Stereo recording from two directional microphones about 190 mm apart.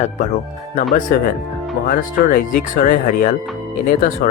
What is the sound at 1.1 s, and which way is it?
Speech, 50° left (ahead or behind).